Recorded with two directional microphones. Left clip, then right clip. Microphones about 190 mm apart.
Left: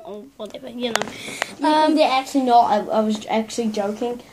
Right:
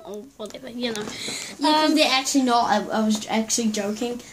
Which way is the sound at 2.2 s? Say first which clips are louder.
Left 5 dB; 25° right (ahead or behind).